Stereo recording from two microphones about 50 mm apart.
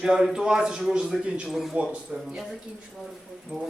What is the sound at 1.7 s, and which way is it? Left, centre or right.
A man's voice, centre.